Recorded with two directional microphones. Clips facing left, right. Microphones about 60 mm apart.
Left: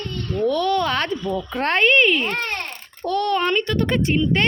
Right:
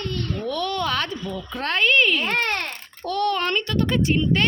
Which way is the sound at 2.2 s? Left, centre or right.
Right.